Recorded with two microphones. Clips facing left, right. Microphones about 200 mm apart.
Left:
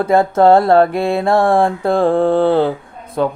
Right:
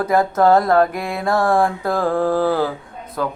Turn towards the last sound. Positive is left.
turn(degrees=25)  # may be behind; listen again after turning